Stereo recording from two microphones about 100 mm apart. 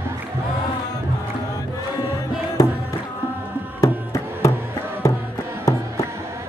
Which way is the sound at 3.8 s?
30° left (ahead or behind).